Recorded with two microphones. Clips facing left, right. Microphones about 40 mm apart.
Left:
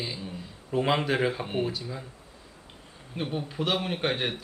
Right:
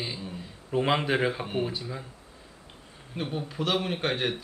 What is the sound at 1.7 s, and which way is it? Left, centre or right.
Speech, centre.